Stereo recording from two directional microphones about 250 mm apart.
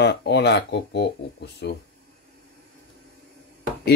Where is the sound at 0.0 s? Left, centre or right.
Left.